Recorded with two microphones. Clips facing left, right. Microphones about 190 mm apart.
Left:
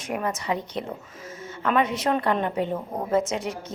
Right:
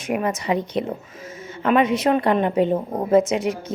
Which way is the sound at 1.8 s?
90° right.